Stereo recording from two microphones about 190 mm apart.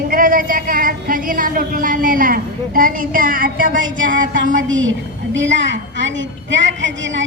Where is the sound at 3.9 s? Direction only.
85° right.